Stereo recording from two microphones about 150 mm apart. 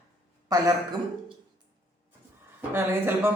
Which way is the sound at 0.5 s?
25° right (ahead or behind).